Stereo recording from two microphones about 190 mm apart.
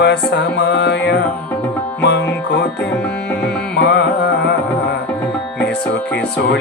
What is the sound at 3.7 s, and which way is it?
Music, 60° left (ahead or behind).